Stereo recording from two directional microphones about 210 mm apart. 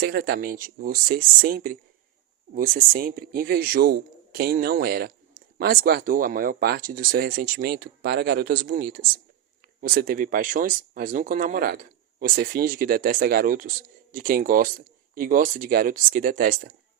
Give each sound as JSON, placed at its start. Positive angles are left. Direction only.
{"t": 0.0, "sound": "speech", "side_deg": -45}